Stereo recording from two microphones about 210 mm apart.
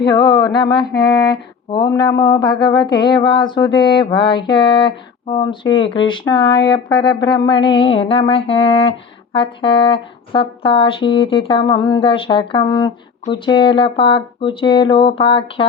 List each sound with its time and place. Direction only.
0.0 s speech: 20° left (ahead or behind)